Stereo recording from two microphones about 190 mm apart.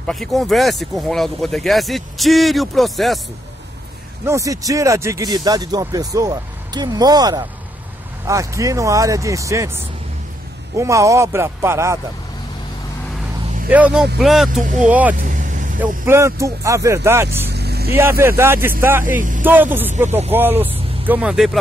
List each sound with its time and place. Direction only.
0.0 s speech: centre (ahead or behind)
4.3 s speech: 15° right (ahead or behind)
10.8 s speech: 15° right (ahead or behind)
13.7 s speech: 5° right (ahead or behind)
15.1 s vehicle: 45° right (ahead or behind)
15.8 s speech: 15° right (ahead or behind)
17.5 s vehicle: 60° right (ahead or behind)
17.9 s speech: 10° right (ahead or behind)